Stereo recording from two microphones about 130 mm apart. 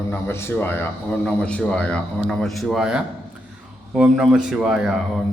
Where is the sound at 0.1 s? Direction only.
20° left (ahead or behind).